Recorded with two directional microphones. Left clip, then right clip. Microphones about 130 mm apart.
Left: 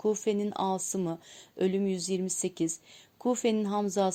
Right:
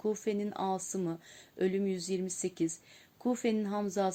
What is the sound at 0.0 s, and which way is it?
Speech, 35° left (ahead or behind).